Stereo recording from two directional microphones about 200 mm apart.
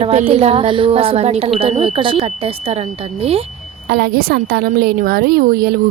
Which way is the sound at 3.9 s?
50° right (ahead or behind).